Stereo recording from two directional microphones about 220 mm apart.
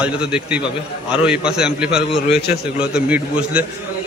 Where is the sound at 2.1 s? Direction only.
50° left (ahead or behind).